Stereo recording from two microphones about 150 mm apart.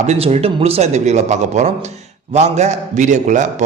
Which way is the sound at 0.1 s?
45° right (ahead or behind).